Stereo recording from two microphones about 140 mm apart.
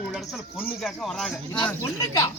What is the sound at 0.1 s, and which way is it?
Speech, 5° right (ahead or behind).